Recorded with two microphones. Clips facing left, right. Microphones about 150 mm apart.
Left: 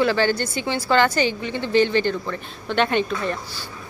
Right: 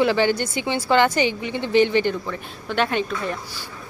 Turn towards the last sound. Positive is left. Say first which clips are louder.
# left 2 dB
turn(degrees=-5)  # may be behind; listen again after turning